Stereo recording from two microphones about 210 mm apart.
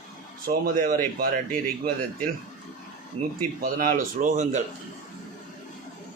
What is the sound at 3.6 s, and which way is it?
A man's voice, 40° right (ahead or behind).